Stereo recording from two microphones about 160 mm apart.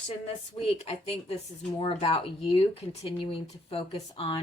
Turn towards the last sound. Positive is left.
turn(degrees=35)  # may be behind; listen again after turning